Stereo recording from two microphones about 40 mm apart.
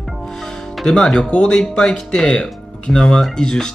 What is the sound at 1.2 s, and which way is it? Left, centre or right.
Speech, left.